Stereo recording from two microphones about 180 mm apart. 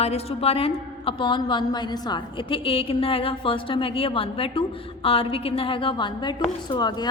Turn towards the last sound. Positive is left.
turn(degrees=25)  # may be behind; listen again after turning